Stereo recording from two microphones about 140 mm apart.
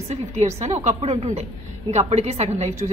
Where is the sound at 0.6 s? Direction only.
50° right (ahead or behind).